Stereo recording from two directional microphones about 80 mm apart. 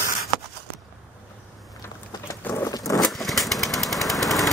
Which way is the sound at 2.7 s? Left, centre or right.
Left.